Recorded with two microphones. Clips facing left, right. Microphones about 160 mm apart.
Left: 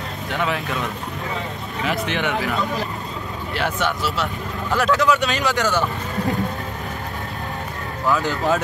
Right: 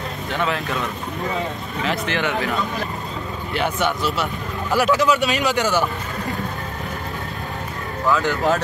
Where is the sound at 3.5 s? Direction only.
Centre (ahead or behind).